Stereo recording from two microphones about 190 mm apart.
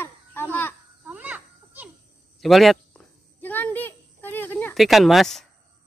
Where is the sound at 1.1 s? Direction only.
10° right (ahead or behind).